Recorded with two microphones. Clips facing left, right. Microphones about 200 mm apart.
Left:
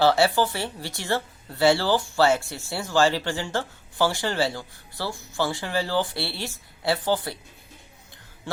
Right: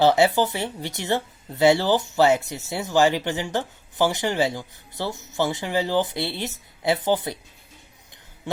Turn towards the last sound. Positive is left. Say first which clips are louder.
# right 2 dB
turn(degrees=-20)  # may be behind; listen again after turning